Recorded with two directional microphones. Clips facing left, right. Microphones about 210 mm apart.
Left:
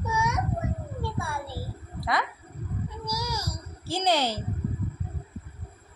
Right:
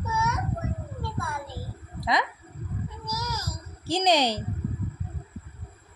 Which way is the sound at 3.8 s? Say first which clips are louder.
Right 3 dB; 15° right (ahead or behind).